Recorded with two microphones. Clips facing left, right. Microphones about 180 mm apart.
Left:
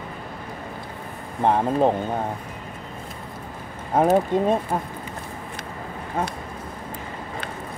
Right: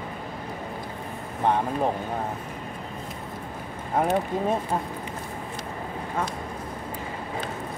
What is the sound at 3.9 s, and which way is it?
Speech, 40° left (ahead or behind).